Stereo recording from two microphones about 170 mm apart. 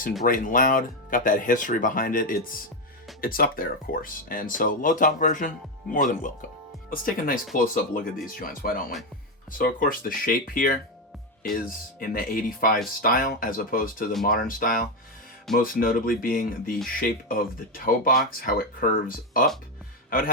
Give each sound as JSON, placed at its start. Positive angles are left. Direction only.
{"t": 0.3, "sound": "a man's voice", "side_deg": 50}